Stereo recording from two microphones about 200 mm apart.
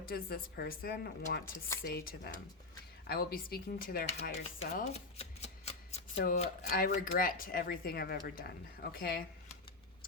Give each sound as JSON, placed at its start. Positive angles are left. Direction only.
{"t": 0.1, "sound": "speech", "side_deg": 50}
{"t": 4.9, "sound": "speech", "side_deg": 30}